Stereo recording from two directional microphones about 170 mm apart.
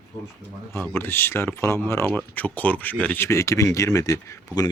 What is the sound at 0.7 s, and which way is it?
Speech, 10° left (ahead or behind).